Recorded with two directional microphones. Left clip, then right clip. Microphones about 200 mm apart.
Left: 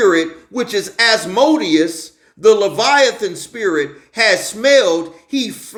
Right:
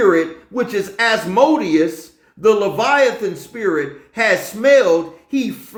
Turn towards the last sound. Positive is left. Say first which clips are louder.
# left 1 dB
turn(degrees=15)  # may be behind; listen again after turning